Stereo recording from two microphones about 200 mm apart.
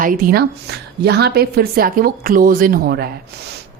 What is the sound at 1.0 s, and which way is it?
A woman's voice, 55° right (ahead or behind).